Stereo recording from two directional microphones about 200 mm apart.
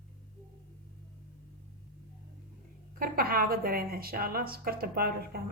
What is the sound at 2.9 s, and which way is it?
A woman's voice, 45° right (ahead or behind).